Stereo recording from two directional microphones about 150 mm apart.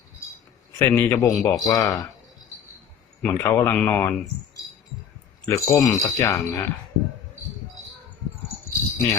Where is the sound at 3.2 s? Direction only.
15° left (ahead or behind).